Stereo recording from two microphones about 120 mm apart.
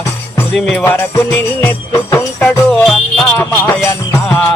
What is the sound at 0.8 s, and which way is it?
Music, 20° left (ahead or behind).